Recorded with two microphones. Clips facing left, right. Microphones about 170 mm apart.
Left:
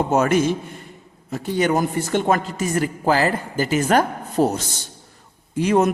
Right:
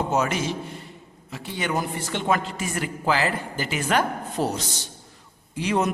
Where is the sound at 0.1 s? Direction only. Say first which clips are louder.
Left 7 dB; 50° left (ahead or behind).